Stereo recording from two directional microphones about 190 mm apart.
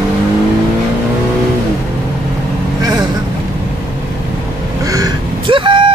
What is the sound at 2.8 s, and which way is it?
Vehicle, 20° right (ahead or behind).